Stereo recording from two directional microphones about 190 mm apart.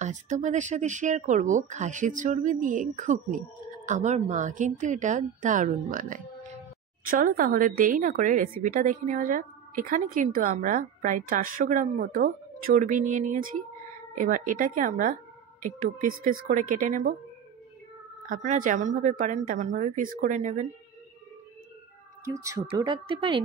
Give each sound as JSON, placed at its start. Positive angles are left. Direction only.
{"t": 0.0, "sound": "a woman's voice", "side_deg": -40}
{"t": 18.2, "sound": "speech", "side_deg": -45}
{"t": 22.2, "sound": "speech", "side_deg": -15}
{"t": 22.7, "sound": "speech", "side_deg": -25}